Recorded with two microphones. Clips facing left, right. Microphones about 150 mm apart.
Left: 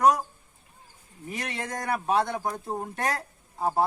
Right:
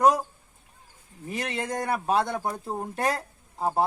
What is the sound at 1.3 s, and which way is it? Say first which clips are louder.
Speech: right 3 dB; 30° right (ahead or behind).